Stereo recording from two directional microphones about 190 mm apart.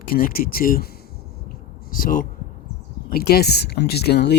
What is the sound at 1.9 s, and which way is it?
Speech, 45° left (ahead or behind).